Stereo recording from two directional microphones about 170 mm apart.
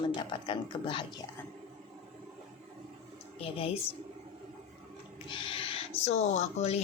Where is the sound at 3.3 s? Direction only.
35° left (ahead or behind).